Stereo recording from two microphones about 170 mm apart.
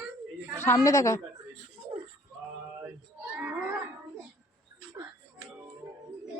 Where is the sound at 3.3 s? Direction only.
10° right (ahead or behind).